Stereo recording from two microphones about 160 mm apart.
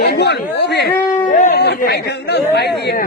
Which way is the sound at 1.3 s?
50° left (ahead or behind).